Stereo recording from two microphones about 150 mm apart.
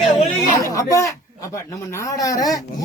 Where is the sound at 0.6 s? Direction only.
20° left (ahead or behind).